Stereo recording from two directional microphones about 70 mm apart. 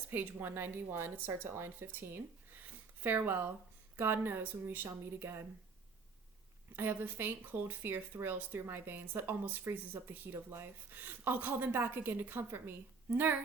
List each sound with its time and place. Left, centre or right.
0.1 s speech: right
6.7 s speech: right